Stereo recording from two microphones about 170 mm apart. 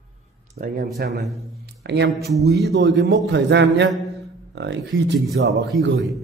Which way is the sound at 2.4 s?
85° right.